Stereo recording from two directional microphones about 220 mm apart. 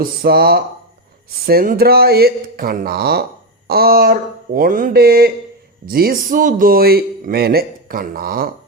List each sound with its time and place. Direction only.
0.0 s speech: 45° right (ahead or behind)